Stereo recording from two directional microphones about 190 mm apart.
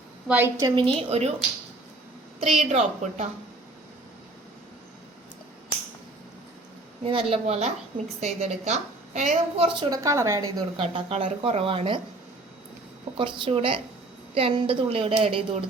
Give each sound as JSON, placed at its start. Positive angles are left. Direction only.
{"t": 0.3, "sound": "a woman's voice", "side_deg": -10}
{"t": 0.8, "sound": "a woman's voice", "side_deg": -30}
{"t": 2.4, "sound": "a woman's voice", "side_deg": -35}
{"t": 7.0, "sound": "a woman's voice", "side_deg": -30}
{"t": 9.9, "sound": "a woman's voice", "side_deg": -15}
{"t": 10.8, "sound": "speech", "side_deg": -30}
{"t": 13.1, "sound": "speech", "side_deg": -25}